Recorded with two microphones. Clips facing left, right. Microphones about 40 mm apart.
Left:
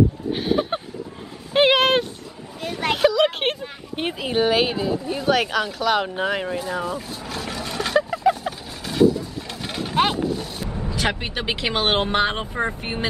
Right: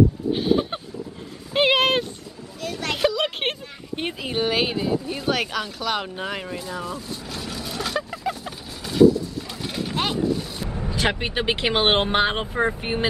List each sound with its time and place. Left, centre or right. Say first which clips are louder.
0.3 s speech: right 1 dB; centre
1.5 s a sound: left 2 dB; centre
2.6 s speech: left 4 dB; centre
3.0 s speech: left 4 dB; centre
7.4 s vehicle: left 2 dB; centre
10.6 s speech: even; centre